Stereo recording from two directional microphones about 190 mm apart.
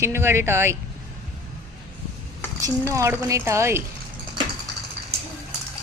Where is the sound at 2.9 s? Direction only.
15° right (ahead or behind).